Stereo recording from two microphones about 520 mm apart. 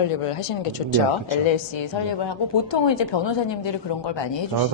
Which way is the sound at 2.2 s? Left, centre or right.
Left.